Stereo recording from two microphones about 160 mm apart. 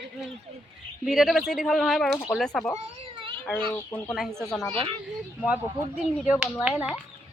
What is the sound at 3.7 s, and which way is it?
Speech, 10° left (ahead or behind).